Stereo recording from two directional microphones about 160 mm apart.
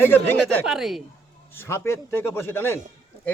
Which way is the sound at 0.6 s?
Centre (ahead or behind).